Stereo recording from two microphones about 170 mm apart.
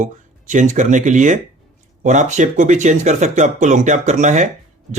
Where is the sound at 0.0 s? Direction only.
45° right (ahead or behind).